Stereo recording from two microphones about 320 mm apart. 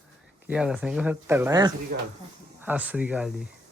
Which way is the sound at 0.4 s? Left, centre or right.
Centre.